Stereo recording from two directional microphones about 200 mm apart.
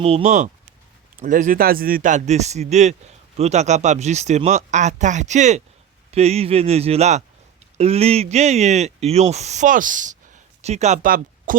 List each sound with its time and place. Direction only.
0.0 s speech: 30° right (ahead or behind)